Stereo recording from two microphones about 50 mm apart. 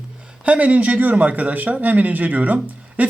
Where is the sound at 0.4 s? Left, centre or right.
Right.